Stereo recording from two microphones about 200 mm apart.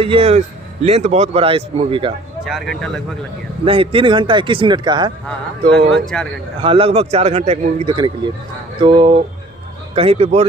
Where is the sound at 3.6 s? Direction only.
25° right (ahead or behind).